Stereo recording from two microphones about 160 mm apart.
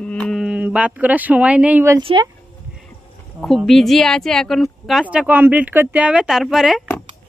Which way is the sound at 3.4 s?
Centre (ahead or behind).